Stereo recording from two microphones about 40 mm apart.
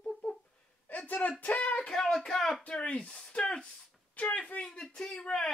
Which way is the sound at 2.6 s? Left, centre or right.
Left.